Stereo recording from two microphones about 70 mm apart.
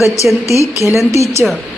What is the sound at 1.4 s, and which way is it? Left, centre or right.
Speech, centre.